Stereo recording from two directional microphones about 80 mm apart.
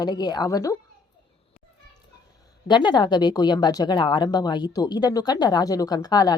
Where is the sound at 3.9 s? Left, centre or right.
Left.